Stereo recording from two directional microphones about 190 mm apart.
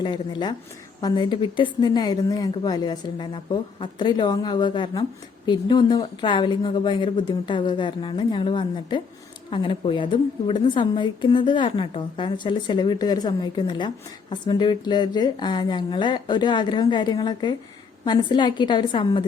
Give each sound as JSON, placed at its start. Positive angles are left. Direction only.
{"t": 0.0, "sound": "a woman's voice", "side_deg": 25}